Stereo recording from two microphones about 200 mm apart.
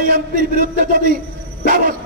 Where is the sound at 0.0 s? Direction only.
45° right (ahead or behind).